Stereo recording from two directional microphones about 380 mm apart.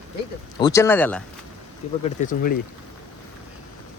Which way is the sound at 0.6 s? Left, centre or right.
Centre.